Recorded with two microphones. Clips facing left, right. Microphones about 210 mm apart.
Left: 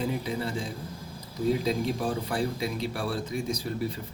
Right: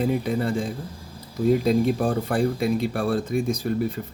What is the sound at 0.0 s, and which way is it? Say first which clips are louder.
Speech: right 7 dB; 55° right (ahead or behind).